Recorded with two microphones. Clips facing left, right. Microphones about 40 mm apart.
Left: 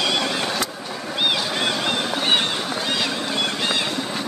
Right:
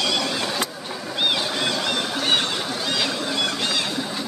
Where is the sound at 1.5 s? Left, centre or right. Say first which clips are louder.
Left 1 dB; left.